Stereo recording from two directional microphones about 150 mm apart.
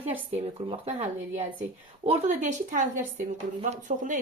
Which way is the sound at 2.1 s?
50° right (ahead or behind).